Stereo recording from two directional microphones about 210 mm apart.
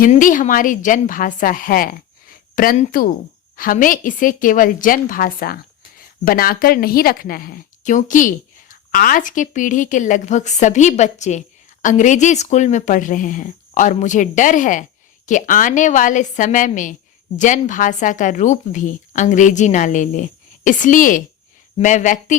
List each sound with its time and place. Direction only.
0.0 s speech: 40° left (ahead or behind)